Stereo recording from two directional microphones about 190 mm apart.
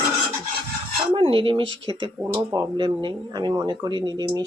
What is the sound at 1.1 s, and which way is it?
Speech, 25° right (ahead or behind).